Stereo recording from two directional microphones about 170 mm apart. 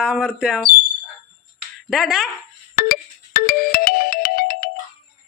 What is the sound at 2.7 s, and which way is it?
Ringtone, 60° left (ahead or behind).